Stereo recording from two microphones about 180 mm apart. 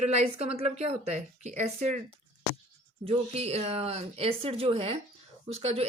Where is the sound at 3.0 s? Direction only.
30° right (ahead or behind).